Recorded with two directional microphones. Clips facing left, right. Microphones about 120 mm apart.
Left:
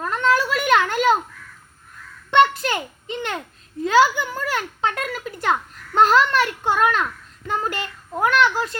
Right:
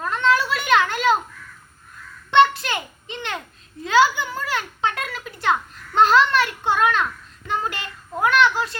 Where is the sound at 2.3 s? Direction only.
45° left (ahead or behind).